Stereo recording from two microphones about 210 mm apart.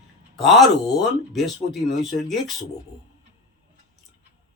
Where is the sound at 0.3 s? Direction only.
Centre (ahead or behind).